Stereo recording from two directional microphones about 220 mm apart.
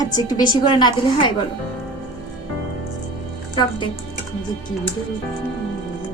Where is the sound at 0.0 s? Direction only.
15° left (ahead or behind).